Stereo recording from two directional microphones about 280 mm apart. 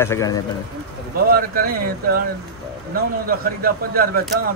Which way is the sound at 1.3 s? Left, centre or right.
Right.